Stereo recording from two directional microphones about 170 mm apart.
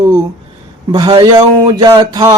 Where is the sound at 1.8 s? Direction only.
20° right (ahead or behind).